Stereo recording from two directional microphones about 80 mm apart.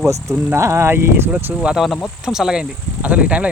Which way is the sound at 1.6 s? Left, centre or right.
Centre.